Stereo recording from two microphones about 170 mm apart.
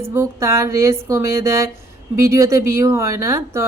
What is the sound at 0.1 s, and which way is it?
Speech, 15° right (ahead or behind).